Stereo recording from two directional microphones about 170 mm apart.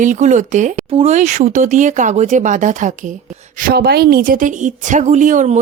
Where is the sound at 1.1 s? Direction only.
45° right (ahead or behind).